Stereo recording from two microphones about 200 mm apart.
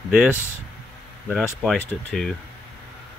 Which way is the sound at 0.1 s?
5° right (ahead or behind).